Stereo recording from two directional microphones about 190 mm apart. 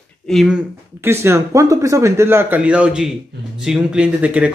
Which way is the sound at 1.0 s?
15° right (ahead or behind).